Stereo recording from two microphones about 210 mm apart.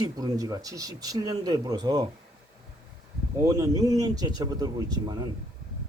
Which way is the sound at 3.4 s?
15° right (ahead or behind).